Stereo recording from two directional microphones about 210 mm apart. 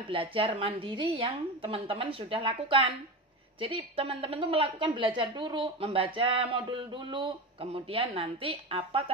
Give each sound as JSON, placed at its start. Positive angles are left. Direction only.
{"t": 0.1, "sound": "a woman's voice", "side_deg": -25}